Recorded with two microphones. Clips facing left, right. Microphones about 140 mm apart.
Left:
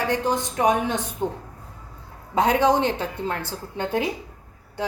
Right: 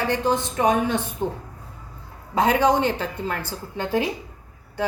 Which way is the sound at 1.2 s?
15° left (ahead or behind).